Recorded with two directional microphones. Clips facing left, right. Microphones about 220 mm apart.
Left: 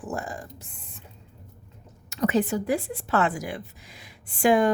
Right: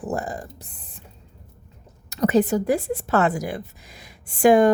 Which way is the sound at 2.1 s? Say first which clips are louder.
Right 5 dB; 40° right (ahead or behind).